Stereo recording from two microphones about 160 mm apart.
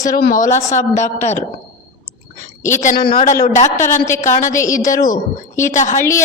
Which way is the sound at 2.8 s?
70° left (ahead or behind).